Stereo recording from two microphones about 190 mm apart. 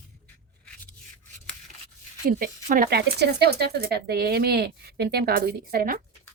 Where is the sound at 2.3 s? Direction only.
45° right (ahead or behind).